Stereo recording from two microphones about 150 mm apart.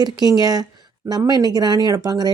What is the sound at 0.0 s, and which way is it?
Speech, 25° right (ahead or behind).